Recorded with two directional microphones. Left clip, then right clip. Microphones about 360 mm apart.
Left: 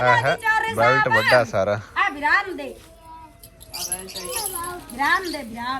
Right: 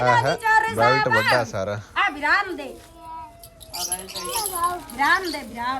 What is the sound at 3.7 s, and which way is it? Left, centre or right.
Keys jangling, right.